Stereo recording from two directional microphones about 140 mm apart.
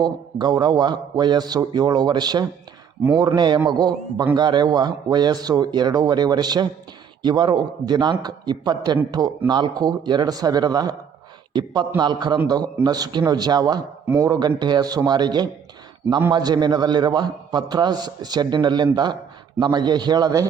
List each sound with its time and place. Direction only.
0.0 s a man's voice: 30° right (ahead or behind)